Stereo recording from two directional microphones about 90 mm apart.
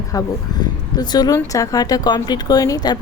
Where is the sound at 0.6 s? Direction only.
50° left (ahead or behind).